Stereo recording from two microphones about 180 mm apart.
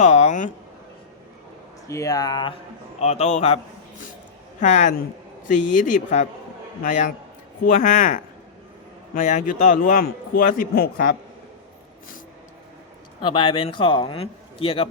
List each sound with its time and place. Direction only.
0.0 s speech: 40° left (ahead or behind)
1.9 s a man's voice: 20° left (ahead or behind)
3.0 s a man's voice: 35° left (ahead or behind)
4.6 s a man's voice: 40° left (ahead or behind)
13.2 s a man's voice: 25° left (ahead or behind)